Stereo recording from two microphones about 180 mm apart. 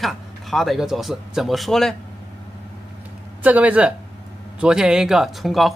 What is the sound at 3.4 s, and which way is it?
Speech, 10° right (ahead or behind).